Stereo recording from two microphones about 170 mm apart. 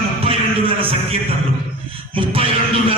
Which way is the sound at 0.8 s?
35° right (ahead or behind).